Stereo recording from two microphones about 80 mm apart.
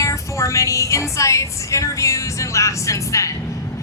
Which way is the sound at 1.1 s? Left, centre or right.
Left.